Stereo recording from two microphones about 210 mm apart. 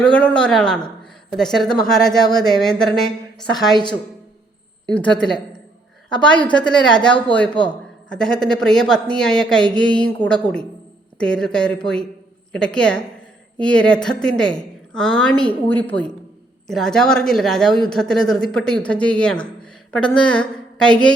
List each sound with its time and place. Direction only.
0.0 s speech: 5° left (ahead or behind)
3.5 s a woman's voice: 20° left (ahead or behind)
4.9 s a woman's voice: 5° left (ahead or behind)